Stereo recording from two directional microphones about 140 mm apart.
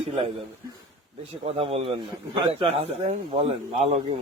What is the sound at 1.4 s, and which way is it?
A man's voice, 40° right (ahead or behind).